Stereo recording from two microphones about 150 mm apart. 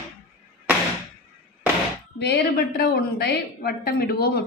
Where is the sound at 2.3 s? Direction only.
90° left.